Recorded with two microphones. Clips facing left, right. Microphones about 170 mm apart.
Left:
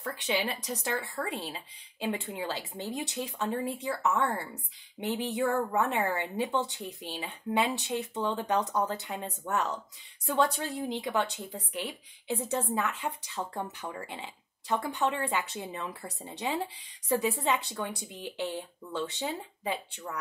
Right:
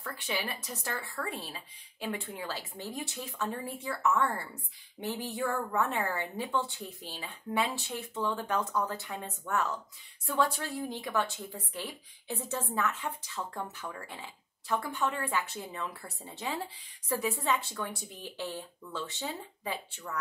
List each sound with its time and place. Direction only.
0.0 s speech: 20° left (ahead or behind)